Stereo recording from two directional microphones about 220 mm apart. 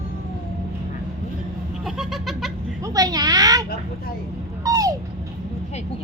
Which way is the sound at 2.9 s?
15° right (ahead or behind).